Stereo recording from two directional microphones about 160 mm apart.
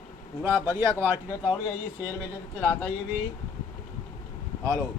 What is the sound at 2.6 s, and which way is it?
Speech, 10° left (ahead or behind).